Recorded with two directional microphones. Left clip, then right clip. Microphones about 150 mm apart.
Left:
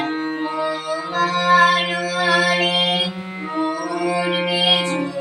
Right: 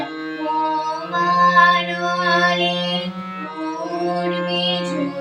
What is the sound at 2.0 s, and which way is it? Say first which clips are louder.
Music: right 2 dB; 5° left (ahead or behind).